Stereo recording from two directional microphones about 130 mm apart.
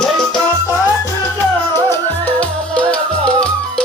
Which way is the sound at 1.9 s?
10° left (ahead or behind).